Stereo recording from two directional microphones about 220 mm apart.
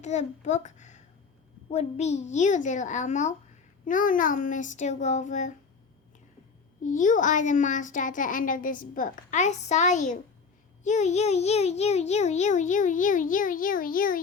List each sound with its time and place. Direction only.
0.0 s a child's voice: 30° left (ahead or behind)
6.8 s a child's voice: 35° left (ahead or behind)